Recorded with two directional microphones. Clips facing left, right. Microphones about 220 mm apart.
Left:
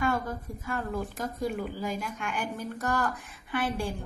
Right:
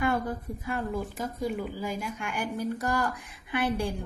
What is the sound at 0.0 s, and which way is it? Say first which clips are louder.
A woman's voice: right 1 dB; 20° right (ahead or behind).